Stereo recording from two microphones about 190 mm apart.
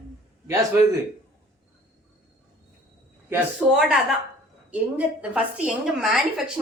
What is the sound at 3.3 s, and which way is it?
A woman's voice, 5° right (ahead or behind).